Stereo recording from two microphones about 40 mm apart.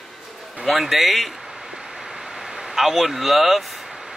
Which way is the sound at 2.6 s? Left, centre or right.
Centre.